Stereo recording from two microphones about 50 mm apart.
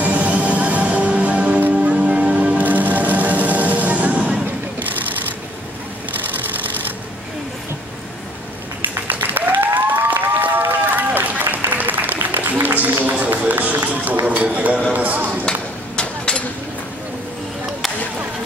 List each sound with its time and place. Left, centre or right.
0.0 s music: right
9.0 s applause: right
13.2 s run: right
14.2 s a sound: right
14.9 s chop: right
16.0 s a sound: centre